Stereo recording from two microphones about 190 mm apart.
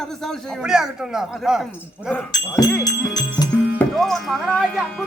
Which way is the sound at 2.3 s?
15° left (ahead or behind).